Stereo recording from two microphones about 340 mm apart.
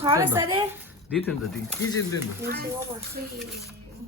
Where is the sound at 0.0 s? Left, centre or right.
Centre.